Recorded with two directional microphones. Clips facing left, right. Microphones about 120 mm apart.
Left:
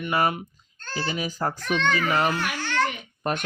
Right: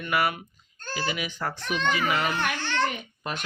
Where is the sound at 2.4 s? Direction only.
5° left (ahead or behind).